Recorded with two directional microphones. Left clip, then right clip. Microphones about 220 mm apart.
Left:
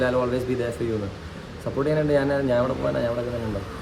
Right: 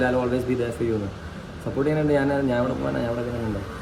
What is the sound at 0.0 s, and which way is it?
Speech, 5° left (ahead or behind).